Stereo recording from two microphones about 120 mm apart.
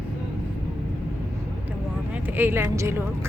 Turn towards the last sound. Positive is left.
turn(degrees=-20)  # may be behind; listen again after turning